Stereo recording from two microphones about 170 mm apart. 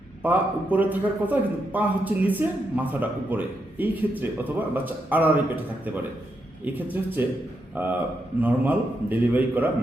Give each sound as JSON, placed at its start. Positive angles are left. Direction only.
{"t": 0.2, "sound": "a man's voice", "side_deg": -10}
{"t": 6.7, "sound": "a man's voice", "side_deg": -10}